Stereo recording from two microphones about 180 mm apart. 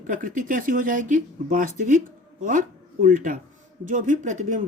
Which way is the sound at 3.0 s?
45° right (ahead or behind).